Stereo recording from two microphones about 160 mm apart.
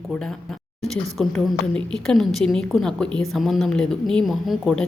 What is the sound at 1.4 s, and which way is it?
A woman's voice, 5° left (ahead or behind).